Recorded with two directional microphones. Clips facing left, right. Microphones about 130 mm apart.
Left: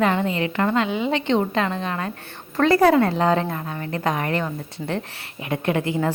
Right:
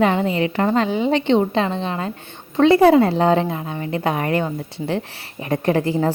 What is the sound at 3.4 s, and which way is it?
A woman's voice, 15° right (ahead or behind).